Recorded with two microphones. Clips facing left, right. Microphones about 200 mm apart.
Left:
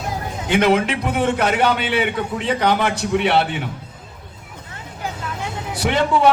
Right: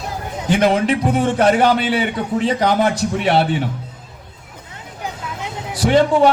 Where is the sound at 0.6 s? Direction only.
35° right (ahead or behind).